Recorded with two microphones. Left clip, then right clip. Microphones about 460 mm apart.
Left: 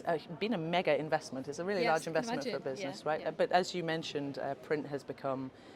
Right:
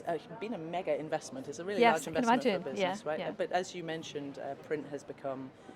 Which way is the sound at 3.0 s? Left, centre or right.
Left.